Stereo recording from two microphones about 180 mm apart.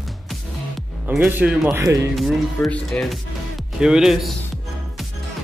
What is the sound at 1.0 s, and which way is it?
Speech, 10° right (ahead or behind).